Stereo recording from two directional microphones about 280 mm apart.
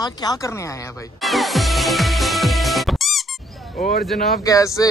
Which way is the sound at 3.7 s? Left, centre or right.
Left.